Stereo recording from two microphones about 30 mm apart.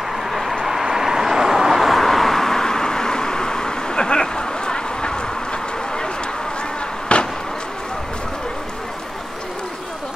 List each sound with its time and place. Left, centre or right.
0.2 s vehicle: centre
2.0 s vehicle: centre; by 6.0 s left
7.1 s a sound: left